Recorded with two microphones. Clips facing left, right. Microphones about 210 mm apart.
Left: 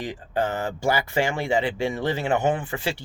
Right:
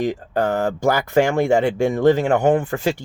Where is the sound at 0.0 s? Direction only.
50° right (ahead or behind).